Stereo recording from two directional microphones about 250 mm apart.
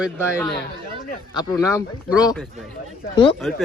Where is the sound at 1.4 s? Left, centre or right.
Centre.